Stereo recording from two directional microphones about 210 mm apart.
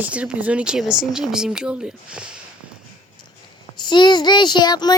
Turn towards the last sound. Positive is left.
turn(degrees=20)  # may be behind; listen again after turning